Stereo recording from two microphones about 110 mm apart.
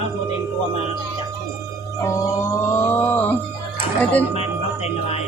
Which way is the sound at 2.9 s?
15° left (ahead or behind).